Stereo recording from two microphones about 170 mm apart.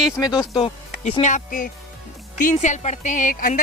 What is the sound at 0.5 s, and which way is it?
Speech, 30° left (ahead or behind).